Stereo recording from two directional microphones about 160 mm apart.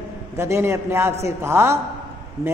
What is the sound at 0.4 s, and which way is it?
A man's voice, 15° right (ahead or behind).